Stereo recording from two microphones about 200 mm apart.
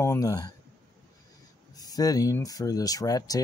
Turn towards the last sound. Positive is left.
turn(degrees=20)  # may be behind; listen again after turning